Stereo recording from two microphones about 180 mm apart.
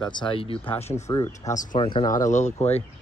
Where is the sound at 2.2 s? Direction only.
40° left (ahead or behind).